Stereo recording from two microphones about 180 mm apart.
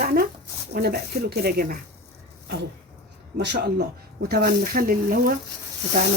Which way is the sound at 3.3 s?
65° right (ahead or behind).